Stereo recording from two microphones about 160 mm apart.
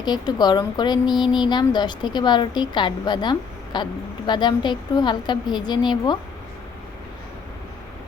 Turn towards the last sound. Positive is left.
turn(degrees=25)  # may be behind; listen again after turning